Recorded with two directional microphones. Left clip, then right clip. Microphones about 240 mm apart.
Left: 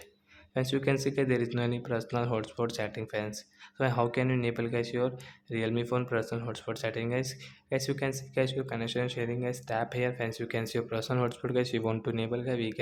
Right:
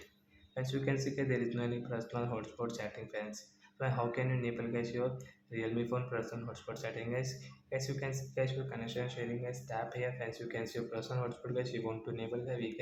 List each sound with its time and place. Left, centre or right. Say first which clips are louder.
0.5 s speech: left 8 dB; left